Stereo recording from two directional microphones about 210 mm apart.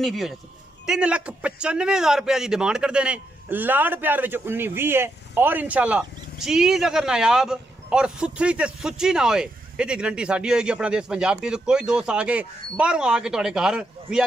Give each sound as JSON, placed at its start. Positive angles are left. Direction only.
{"t": 0.0, "sound": "a man's voice", "side_deg": 0}